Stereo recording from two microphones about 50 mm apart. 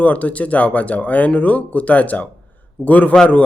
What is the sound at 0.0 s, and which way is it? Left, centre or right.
Speech, left.